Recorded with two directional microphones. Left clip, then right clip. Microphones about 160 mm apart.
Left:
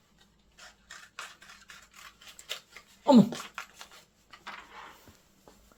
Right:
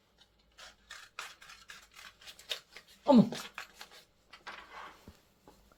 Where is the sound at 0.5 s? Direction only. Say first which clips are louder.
Left 1 dB; centre (ahead or behind).